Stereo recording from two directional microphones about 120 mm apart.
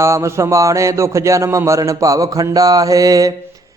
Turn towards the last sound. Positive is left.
turn(degrees=-30)  # may be behind; listen again after turning